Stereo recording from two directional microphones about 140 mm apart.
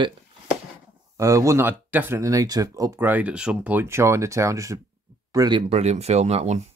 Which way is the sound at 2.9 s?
15° right (ahead or behind).